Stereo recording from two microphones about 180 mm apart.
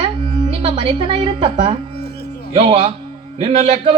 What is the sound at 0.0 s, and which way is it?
Music, 25° right (ahead or behind).